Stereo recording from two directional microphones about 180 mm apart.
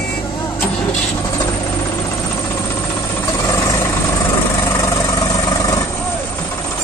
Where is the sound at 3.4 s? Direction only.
20° left (ahead or behind).